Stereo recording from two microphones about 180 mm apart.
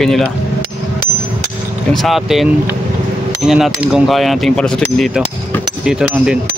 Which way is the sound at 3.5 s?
5° right (ahead or behind).